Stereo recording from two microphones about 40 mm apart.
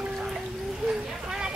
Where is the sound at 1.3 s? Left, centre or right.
Right.